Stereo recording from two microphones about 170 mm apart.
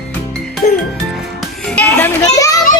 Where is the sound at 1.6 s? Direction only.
10° left (ahead or behind).